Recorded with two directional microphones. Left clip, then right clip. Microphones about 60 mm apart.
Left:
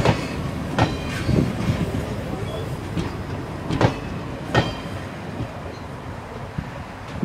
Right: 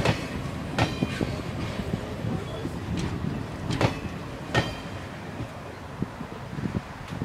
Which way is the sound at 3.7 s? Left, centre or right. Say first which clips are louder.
Left 5 dB; right.